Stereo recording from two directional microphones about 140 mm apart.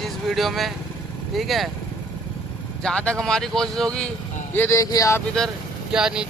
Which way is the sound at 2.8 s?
10° left (ahead or behind).